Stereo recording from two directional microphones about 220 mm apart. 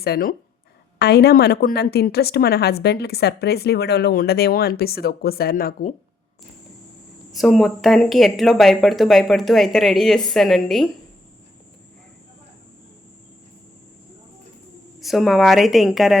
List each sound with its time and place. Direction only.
0.0 s a woman's voice: 40° left (ahead or behind)
7.3 s speech: centre (ahead or behind)
15.0 s speech: centre (ahead or behind)